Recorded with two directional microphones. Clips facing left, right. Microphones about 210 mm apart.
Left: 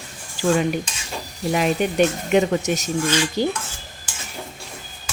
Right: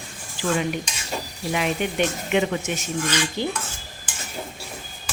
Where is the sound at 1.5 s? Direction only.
40° left (ahead or behind).